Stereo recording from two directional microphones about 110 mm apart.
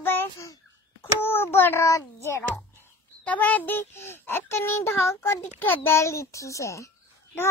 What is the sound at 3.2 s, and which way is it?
A child's voice, 15° left (ahead or behind).